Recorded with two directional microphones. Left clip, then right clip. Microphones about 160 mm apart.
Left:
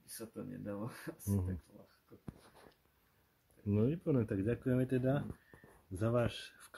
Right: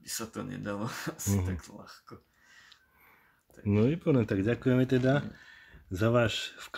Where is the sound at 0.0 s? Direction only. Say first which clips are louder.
Right 10 dB; 15° left (ahead or behind).